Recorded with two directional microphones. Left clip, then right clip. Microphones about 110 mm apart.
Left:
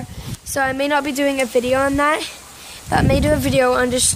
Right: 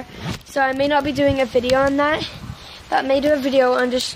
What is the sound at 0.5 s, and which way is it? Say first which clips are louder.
Speech: even; 25° left (ahead or behind).